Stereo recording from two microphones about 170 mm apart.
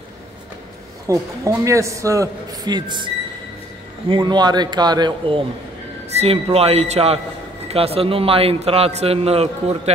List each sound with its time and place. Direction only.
1.0 s a man's voice: 20° right (ahead or behind)
4.1 s a man's voice: 25° right (ahead or behind)
6.1 s a man's voice: 35° right (ahead or behind)